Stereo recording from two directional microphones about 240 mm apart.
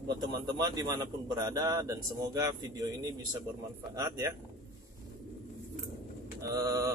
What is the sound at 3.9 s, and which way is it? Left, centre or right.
Speech, centre.